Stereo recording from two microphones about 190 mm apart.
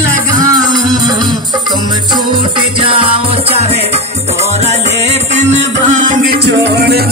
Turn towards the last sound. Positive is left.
turn(degrees=-55)  # may be behind; listen again after turning